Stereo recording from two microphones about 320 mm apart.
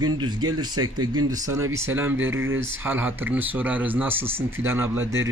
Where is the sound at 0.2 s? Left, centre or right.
Right.